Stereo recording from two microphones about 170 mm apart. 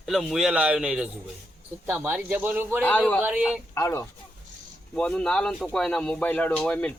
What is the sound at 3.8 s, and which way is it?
Speech, 15° left (ahead or behind).